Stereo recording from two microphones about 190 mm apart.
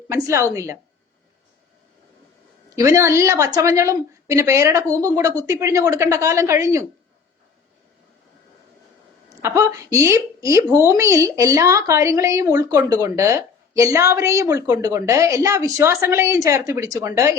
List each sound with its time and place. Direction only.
0.1 s a woman's voice: 15° right (ahead or behind)
2.7 s a woman's voice: 15° right (ahead or behind)
9.4 s a woman's voice: 15° right (ahead or behind)